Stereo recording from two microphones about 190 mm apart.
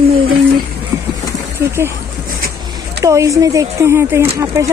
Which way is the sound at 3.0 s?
15° right (ahead or behind).